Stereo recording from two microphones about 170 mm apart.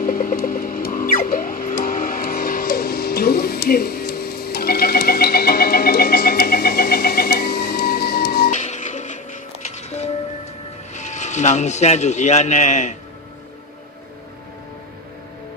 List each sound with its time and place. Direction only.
0.0 s music: 55° left (ahead or behind)
8.5 s music: 45° left (ahead or behind)
10.9 s speech: 45° left (ahead or behind)